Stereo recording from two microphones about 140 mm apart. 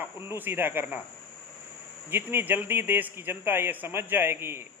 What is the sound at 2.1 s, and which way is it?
Speech, 15° right (ahead or behind).